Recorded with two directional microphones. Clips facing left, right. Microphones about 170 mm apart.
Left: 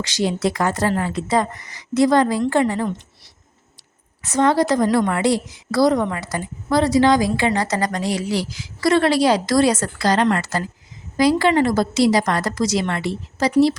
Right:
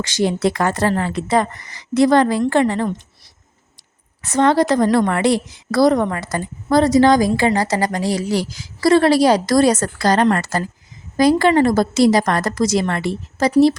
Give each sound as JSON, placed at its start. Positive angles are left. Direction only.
{"t": 0.0, "sound": "a woman's voice", "side_deg": -50}
{"t": 4.2, "sound": "a woman's voice", "side_deg": -60}